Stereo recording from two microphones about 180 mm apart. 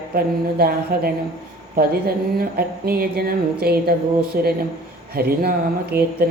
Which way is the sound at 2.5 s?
55° right (ahead or behind).